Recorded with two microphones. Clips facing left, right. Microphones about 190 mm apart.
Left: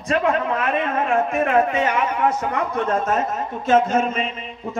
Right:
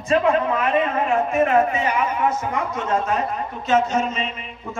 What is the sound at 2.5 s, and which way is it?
A man's voice, 55° left (ahead or behind).